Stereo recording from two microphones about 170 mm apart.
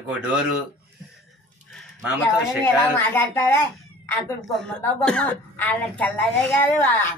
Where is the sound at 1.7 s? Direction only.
10° left (ahead or behind).